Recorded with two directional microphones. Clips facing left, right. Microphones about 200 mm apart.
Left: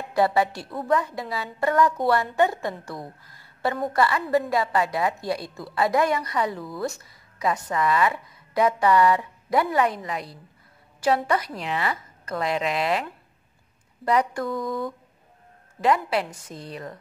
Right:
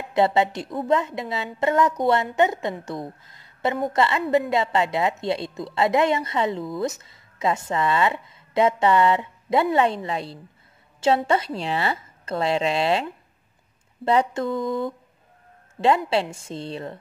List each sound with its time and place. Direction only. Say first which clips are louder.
0.1 s a woman's voice: right 2 dB; 25° right (ahead or behind)